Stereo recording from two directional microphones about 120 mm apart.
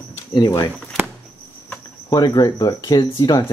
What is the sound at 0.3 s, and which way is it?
Speech, 30° left (ahead or behind).